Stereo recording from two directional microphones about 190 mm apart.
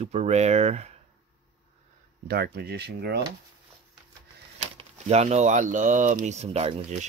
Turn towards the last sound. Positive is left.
turn(degrees=-35)  # may be behind; listen again after turning